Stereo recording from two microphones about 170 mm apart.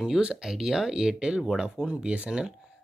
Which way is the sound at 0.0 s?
5° right (ahead or behind).